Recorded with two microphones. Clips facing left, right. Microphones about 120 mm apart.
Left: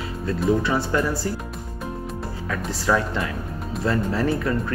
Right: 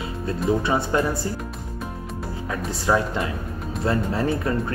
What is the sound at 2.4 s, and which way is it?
Speech, 20° right (ahead or behind).